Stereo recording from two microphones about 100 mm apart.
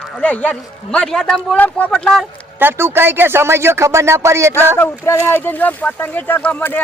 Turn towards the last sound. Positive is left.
turn(degrees=20)  # may be behind; listen again after turning